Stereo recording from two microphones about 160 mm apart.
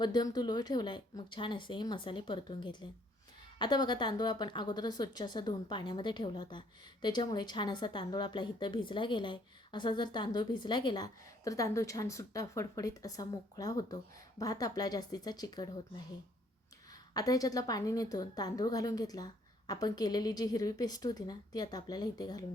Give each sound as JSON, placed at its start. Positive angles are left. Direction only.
{"t": 0.0, "sound": "a woman's voice", "side_deg": 25}
{"t": 17.2, "sound": "a woman's voice", "side_deg": 20}